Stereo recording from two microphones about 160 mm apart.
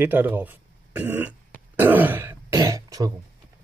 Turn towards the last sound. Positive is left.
turn(degrees=-20)  # may be behind; listen again after turning